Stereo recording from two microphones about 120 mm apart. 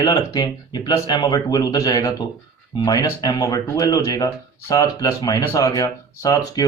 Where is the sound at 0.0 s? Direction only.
35° left (ahead or behind).